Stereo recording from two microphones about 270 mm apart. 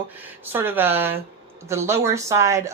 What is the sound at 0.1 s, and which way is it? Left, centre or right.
A woman's voice, centre.